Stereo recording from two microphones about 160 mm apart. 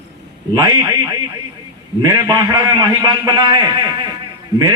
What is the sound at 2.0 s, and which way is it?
A man's voice, 25° right (ahead or behind).